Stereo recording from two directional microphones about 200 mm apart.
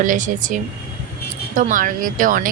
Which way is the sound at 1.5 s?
40° right (ahead or behind).